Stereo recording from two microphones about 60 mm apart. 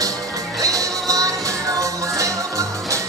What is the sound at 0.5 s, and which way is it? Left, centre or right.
Music, right.